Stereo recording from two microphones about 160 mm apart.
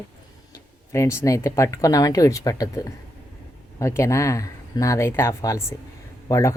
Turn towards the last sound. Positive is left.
turn(degrees=20)  # may be behind; listen again after turning